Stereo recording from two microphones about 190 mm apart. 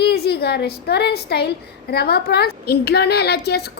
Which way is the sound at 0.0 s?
60° left (ahead or behind).